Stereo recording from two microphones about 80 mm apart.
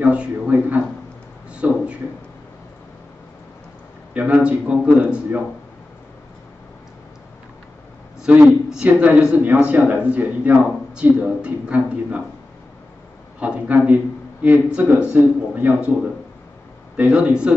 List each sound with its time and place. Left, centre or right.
0.0 s a man's voice: centre
1.5 s a sound: centre
4.1 s a man's voice: centre
8.2 s a man's voice: centre
13.4 s a man's voice: centre
16.9 s a man's voice: centre